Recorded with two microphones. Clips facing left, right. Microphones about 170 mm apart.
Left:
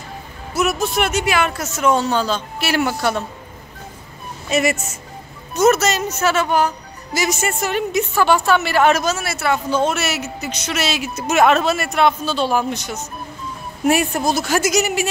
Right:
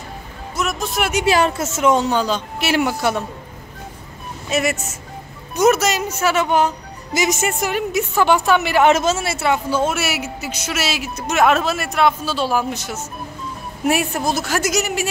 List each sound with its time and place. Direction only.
0.6 s speech: 5° left (ahead or behind)
1.2 s a woman's voice: 30° right (ahead or behind); by 3.3 s 10° right (ahead or behind)
4.5 s speech: centre (ahead or behind)
5.5 s a woman's voice: 10° right (ahead or behind)
7.7 s a woman's voice: 5° right (ahead or behind); by 9.6 s 25° right (ahead or behind)
9.7 s speech: 5° right (ahead or behind)